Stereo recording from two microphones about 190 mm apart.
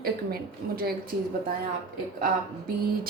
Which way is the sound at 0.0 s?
55° right (ahead or behind).